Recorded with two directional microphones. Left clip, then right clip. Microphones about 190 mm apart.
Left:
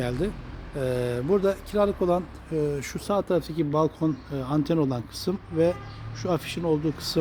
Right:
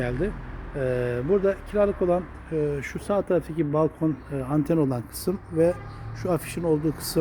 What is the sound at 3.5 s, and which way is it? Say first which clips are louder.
Speech: right 1 dB; 20° left (ahead or behind).